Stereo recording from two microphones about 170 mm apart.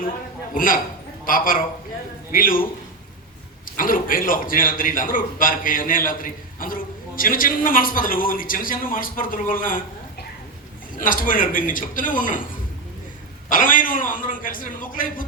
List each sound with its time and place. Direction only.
0.5 s a man's voice: 55° left (ahead or behind)
3.8 s a man's voice: 55° left (ahead or behind)
10.9 s a man's voice: 55° left (ahead or behind)
13.5 s a man's voice: 50° left (ahead or behind)